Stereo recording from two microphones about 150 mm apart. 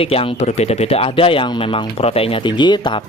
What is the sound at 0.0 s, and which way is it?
Speech, 40° left (ahead or behind).